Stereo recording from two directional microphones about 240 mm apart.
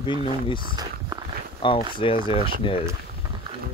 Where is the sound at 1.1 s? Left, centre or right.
Centre.